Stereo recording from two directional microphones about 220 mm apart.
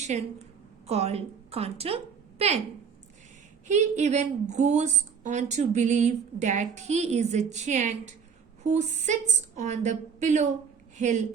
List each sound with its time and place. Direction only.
0.0 s a woman's voice: 30° right (ahead or behind)
3.7 s a woman's voice: 30° right (ahead or behind)